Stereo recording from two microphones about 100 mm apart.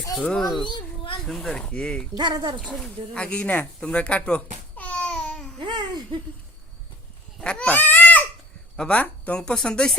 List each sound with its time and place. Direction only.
0.1 s a child's voice: 5° left (ahead or behind)
0.7 s children playing: 60° left (ahead or behind)
1.3 s speech: 5° left (ahead or behind)
2.1 s speech: 45° right (ahead or behind)
2.6 s speech: 5° left (ahead or behind)
5.5 s babbling: 50° right (ahead or behind)
7.4 s goat: 15° left (ahead or behind)
8.7 s speech: 10° left (ahead or behind)